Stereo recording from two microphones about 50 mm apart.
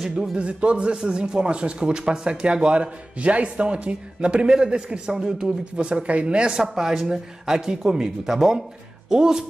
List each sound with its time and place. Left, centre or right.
0.1 s speech: centre
6.7 s speech: centre